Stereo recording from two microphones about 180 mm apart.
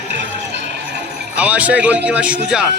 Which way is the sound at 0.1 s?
75° right (ahead or behind).